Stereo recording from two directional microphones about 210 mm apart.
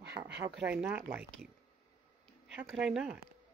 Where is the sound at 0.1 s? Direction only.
50° right (ahead or behind).